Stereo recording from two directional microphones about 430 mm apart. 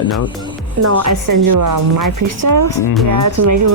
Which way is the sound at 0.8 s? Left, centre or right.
Right.